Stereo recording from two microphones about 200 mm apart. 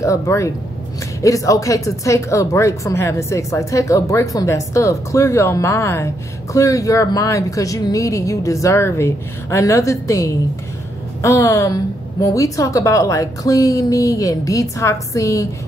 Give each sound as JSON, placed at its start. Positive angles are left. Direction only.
{"t": 0.0, "sound": "speech", "side_deg": 15}